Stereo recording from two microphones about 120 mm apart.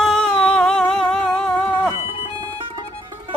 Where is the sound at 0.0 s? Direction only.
5° left (ahead or behind).